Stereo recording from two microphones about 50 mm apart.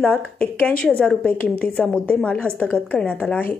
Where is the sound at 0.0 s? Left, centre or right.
Left.